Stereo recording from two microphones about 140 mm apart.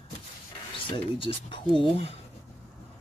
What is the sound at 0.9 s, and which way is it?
Speech, 35° left (ahead or behind).